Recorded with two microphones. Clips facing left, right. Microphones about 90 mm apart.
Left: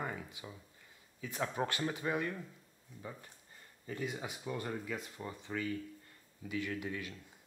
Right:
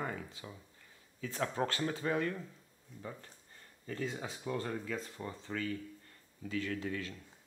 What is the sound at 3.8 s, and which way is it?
Speech, 15° left (ahead or behind).